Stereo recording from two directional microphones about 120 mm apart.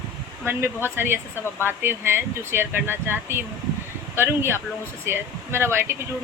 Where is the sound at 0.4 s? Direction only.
20° right (ahead or behind).